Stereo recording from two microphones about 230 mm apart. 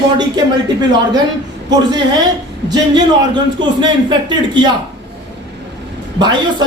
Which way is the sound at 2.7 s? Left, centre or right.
Centre.